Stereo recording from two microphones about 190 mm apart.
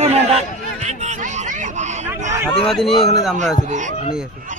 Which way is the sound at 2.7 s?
Centre (ahead or behind).